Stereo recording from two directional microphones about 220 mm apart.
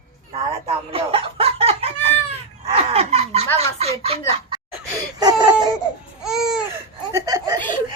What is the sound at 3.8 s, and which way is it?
Speech, 25° right (ahead or behind).